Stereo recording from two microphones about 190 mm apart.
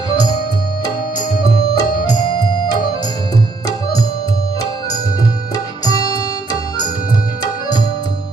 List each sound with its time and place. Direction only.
1.7 s music: 20° left (ahead or behind)